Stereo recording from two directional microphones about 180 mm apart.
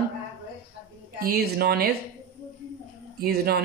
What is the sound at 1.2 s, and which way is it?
Speech, 60° right (ahead or behind).